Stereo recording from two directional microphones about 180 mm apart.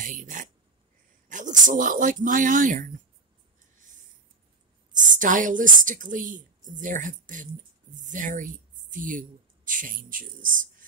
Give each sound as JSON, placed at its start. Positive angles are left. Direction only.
{"t": 0.0, "sound": "speech", "side_deg": -45}
{"t": 4.9, "sound": "speech", "side_deg": -45}